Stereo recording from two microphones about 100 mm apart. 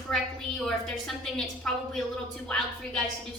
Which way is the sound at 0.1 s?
5° left (ahead or behind).